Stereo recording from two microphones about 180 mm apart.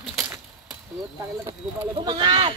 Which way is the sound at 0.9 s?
20° right (ahead or behind).